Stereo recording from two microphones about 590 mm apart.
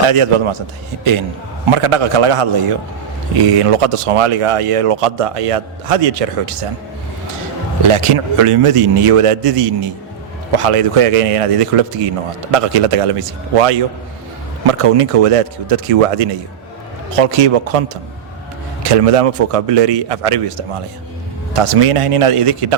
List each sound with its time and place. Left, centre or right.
0.1 s a man's voice: right
1.7 s speech: right
7.8 s speech: right